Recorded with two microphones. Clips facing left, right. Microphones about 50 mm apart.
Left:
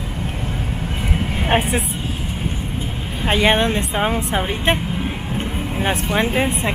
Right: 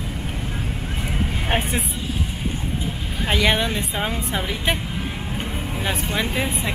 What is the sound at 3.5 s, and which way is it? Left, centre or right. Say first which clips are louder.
A woman's voice: left 5 dB; centre.